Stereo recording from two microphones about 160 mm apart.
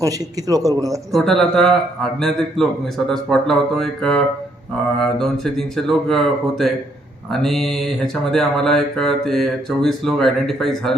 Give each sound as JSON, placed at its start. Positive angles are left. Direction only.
{"t": 0.0, "sound": "a man's voice", "side_deg": -20}
{"t": 1.1, "sound": "speech", "side_deg": 0}